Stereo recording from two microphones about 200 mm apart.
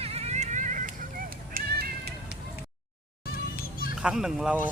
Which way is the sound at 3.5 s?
45° left (ahead or behind).